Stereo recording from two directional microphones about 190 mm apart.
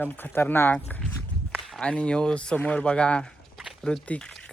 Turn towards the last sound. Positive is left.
turn(degrees=5)  # may be behind; listen again after turning